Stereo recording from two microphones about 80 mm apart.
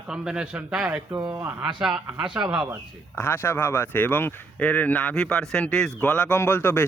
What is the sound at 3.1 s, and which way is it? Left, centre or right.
A man's voice, left.